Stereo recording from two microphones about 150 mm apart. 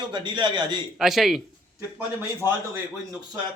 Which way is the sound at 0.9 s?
Centre (ahead or behind).